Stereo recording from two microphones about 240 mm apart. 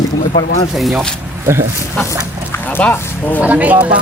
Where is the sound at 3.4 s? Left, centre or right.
Centre.